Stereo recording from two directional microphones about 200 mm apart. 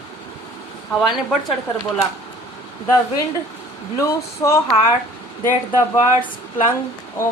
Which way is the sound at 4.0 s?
15° left (ahead or behind).